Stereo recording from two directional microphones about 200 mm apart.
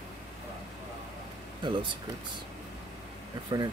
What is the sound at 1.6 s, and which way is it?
Speech, 25° right (ahead or behind).